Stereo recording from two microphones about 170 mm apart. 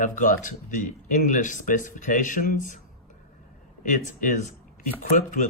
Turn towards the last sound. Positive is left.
turn(degrees=50)  # may be behind; listen again after turning